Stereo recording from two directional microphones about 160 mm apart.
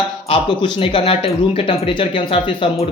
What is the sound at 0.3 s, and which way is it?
A man's voice, 35° left (ahead or behind).